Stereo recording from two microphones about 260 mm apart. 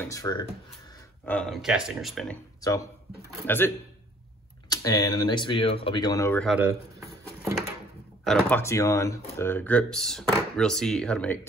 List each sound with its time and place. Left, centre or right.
0.0 s speech: centre
1.2 s speech: centre
2.6 s speech: centre
6.4 s speech: centre
8.2 s speech: centre